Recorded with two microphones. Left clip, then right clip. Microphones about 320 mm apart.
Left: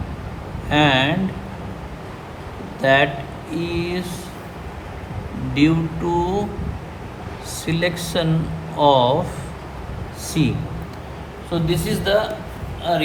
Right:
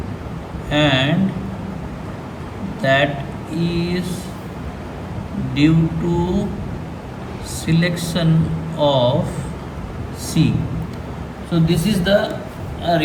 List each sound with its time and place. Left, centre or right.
0.7 s a sound: centre
2.8 s a sound: centre
3.5 s speech: centre
5.5 s speech: centre
7.6 s speech: centre
10.4 s speech: centre
11.5 s speech: centre